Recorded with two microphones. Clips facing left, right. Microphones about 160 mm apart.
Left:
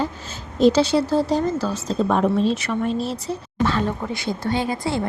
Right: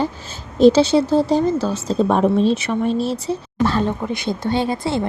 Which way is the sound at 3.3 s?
35° right (ahead or behind).